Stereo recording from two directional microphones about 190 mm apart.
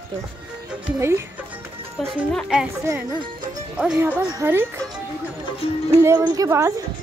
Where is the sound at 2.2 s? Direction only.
Centre (ahead or behind).